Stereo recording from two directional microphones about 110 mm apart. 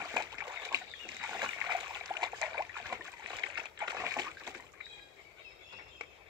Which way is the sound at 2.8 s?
25° right (ahead or behind).